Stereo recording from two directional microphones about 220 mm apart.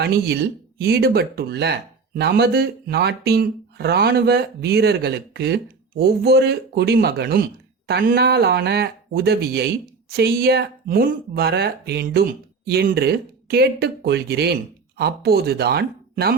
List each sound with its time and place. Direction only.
0.0 s speech: 50° right (ahead or behind)